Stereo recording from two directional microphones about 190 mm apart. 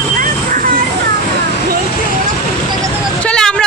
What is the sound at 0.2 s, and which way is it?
Vehicle, 45° right (ahead or behind).